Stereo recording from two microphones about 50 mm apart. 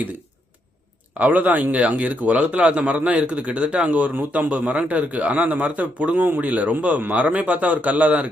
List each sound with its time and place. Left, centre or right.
1.2 s speech: right